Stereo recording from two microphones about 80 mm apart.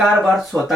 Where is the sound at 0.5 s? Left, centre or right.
Right.